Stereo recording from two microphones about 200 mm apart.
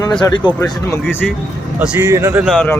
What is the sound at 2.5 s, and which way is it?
Speech, 10° left (ahead or behind).